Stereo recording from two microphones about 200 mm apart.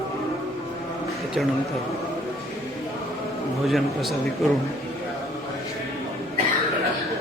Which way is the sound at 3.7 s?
Centre (ahead or behind).